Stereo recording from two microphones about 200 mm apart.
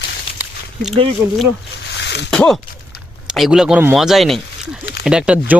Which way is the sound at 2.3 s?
5° left (ahead or behind).